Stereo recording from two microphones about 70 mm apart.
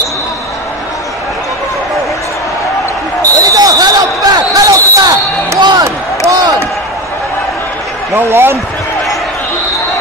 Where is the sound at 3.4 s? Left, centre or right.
Right.